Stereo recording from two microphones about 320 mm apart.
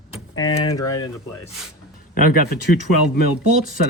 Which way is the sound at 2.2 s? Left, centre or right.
Left.